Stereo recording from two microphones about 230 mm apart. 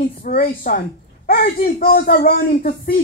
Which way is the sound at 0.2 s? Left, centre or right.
Left.